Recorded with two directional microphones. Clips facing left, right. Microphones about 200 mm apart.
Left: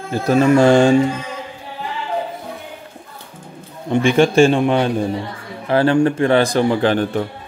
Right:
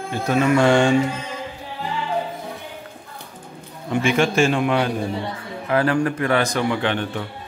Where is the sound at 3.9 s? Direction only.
30° left (ahead or behind).